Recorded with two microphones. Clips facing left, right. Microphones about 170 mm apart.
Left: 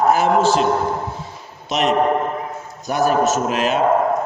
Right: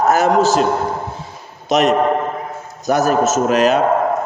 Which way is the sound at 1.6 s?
40° right (ahead or behind).